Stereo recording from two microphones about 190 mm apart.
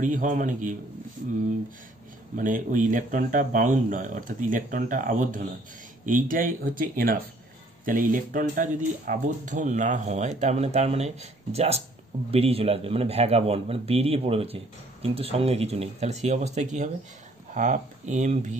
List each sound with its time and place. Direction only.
0.0 s speech: 40° right (ahead or behind)
2.3 s a man's voice: 45° right (ahead or behind)